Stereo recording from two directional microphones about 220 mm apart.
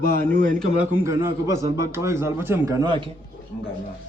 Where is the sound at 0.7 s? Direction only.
10° right (ahead or behind).